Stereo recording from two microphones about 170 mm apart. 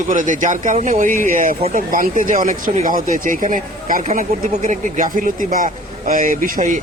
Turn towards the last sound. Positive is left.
turn(degrees=-50)  # may be behind; listen again after turning